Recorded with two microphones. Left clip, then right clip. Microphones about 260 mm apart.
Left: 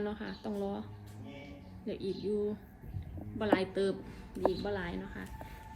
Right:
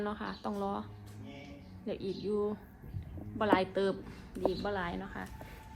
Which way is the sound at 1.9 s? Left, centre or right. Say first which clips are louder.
Even; centre.